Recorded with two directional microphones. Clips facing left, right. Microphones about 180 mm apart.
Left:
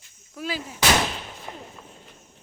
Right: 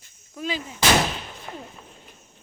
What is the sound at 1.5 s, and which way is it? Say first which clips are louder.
Speech: right 2 dB; 20° left (ahead or behind).